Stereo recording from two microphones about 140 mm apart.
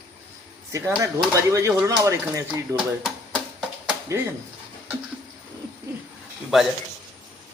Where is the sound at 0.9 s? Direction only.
20° right (ahead or behind).